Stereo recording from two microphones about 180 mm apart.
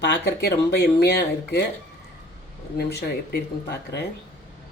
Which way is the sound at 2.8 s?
65° left (ahead or behind).